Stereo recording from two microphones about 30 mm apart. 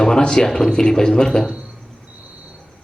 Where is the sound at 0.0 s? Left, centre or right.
Left.